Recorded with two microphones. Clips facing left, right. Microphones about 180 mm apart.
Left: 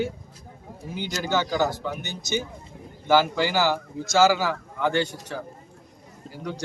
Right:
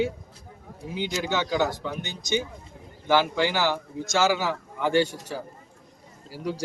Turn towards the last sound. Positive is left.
turn(degrees=-10)  # may be behind; listen again after turning